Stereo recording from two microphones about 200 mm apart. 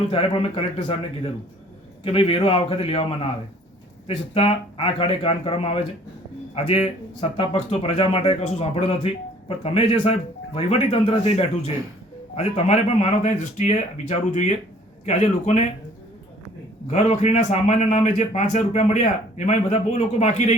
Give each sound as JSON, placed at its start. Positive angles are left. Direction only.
{"t": 0.1, "sound": "a man's voice", "side_deg": 25}
{"t": 16.9, "sound": "a man's voice", "side_deg": 35}